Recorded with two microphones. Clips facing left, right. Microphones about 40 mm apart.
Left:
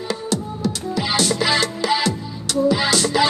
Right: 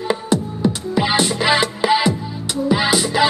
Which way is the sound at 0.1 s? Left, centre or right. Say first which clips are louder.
Right 5 dB; right.